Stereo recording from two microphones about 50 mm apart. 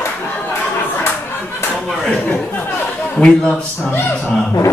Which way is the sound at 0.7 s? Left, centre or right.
Left.